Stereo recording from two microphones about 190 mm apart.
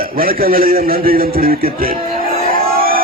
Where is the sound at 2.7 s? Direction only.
50° right (ahead or behind).